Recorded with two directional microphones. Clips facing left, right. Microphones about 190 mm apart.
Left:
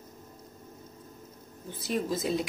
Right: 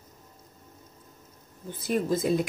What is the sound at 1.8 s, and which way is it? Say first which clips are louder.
Speech: right 4 dB; 50° right (ahead or behind).